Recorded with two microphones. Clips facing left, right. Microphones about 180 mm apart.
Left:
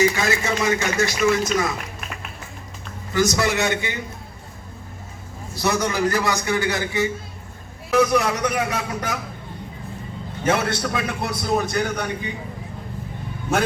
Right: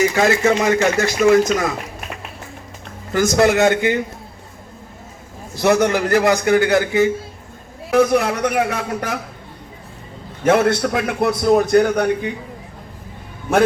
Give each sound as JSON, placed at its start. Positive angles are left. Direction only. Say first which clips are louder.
{"t": 0.2, "sound": "a man's voice", "louder": "right 7 dB", "side_deg": -50}
{"t": 3.1, "sound": "a man's voice", "louder": "right 6 dB", "side_deg": -55}
{"t": 5.6, "sound": "a man's voice", "louder": "right 6 dB", "side_deg": -60}
{"t": 10.4, "sound": "a man's voice", "louder": "right 7 dB", "side_deg": -55}